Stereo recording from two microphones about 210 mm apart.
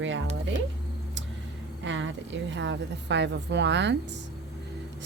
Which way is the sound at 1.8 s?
60° right (ahead or behind).